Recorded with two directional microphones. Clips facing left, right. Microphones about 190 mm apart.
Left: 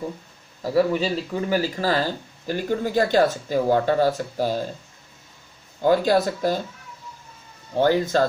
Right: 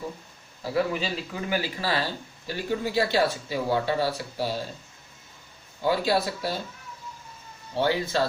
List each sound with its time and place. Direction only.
0.6 s speech: 35° left (ahead or behind)
5.8 s speech: 50° left (ahead or behind)
7.7 s speech: 45° left (ahead or behind)